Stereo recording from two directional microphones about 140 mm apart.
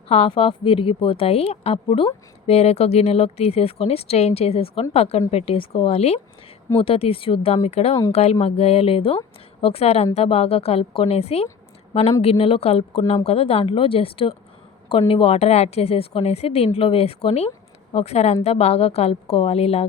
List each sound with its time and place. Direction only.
0.1 s a woman's voice: 40° left (ahead or behind)